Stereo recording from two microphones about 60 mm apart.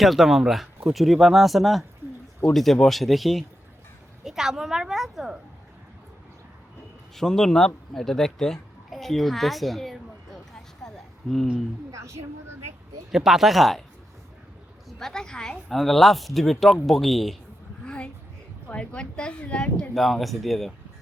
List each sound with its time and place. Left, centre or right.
0.0 s a woman's voice: centre
7.2 s speech: centre
11.9 s speech: right
13.1 s speech: centre
14.8 s speech: centre
17.8 s a sound: centre
18.7 s speech: centre
19.9 s speech: centre